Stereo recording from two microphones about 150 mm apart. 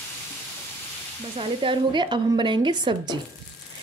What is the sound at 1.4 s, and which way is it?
Speech, 35° right (ahead or behind).